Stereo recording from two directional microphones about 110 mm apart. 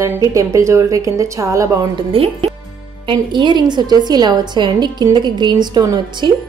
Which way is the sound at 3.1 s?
45° right (ahead or behind).